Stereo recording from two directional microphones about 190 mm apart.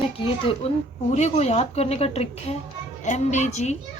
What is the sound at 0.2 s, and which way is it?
A woman's voice, 25° left (ahead or behind).